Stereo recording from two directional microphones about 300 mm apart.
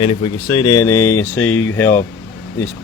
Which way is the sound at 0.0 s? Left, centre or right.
Centre.